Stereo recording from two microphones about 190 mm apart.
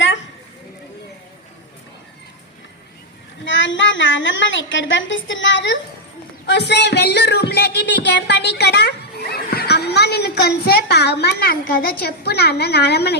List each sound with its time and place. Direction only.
3.4 s a woman's voice: 75° left (ahead or behind)
6.4 s a woman's voice: 65° left (ahead or behind)